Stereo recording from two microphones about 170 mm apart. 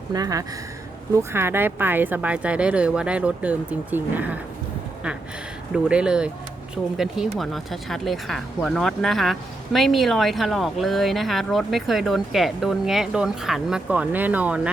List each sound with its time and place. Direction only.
0.1 s speech: 20° right (ahead or behind)
5.7 s speech: 5° right (ahead or behind)